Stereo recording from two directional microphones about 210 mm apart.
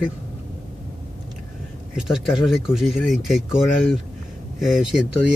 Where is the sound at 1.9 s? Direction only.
5° right (ahead or behind).